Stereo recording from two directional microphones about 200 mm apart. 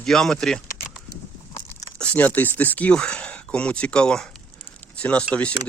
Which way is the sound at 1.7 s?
10° left (ahead or behind).